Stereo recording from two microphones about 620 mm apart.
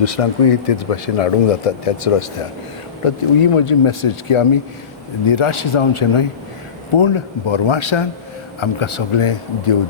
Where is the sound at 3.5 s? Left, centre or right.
Left.